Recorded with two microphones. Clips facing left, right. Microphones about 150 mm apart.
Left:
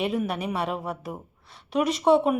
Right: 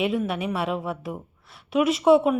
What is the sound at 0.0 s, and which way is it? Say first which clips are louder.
A woman's voice: right 2 dB; centre (ahead or behind).